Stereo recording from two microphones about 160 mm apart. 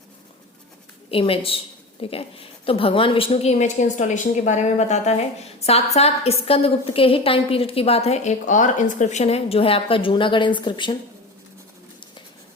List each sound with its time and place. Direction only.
1.1 s a woman's voice: 35° left (ahead or behind)